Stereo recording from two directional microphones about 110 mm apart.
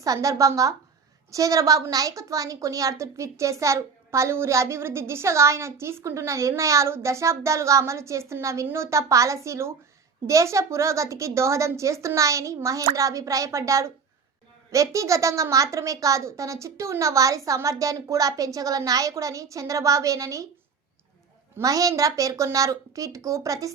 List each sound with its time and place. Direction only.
0.0 s a woman's voice: 30° right (ahead or behind)
21.6 s a woman's voice: 30° right (ahead or behind)